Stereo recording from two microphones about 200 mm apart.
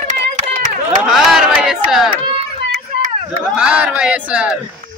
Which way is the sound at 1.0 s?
5° right (ahead or behind).